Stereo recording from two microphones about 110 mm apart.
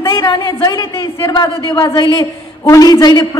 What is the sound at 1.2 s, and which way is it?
A man's voice, 45° left (ahead or behind).